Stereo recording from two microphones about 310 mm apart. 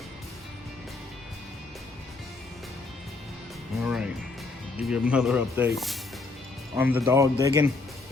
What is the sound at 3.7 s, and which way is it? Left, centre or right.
Music, centre.